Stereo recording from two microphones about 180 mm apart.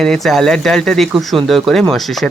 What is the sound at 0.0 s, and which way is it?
Speech, 5° left (ahead or behind).